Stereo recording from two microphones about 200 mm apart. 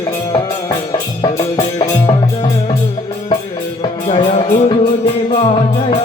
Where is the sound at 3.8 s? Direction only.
30° left (ahead or behind).